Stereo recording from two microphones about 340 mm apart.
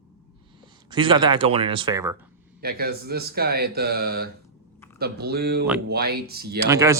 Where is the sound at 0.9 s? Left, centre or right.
Centre.